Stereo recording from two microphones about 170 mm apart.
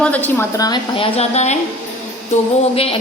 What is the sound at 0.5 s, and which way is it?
Speech, 25° left (ahead or behind).